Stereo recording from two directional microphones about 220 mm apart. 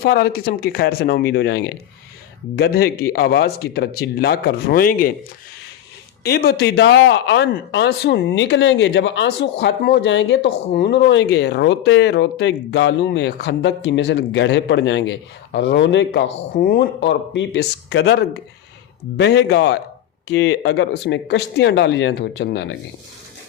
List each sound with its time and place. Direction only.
0.0 s speech: 45° left (ahead or behind)
6.2 s speech: 45° left (ahead or behind)